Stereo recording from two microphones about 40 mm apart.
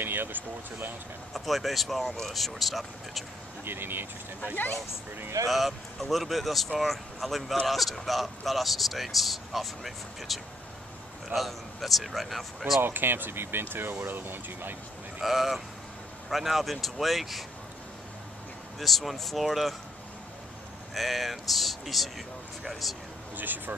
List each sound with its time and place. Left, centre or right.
0.0 s speech: right
1.3 s speech: centre
3.6 s speech: right
5.5 s speech: centre
12.8 s speech: right
15.2 s speech: centre
18.8 s speech: centre
20.9 s speech: centre
23.3 s speech: right